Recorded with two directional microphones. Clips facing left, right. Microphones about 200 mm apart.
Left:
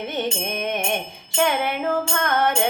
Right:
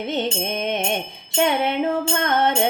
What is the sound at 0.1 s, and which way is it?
Music, 25° right (ahead or behind).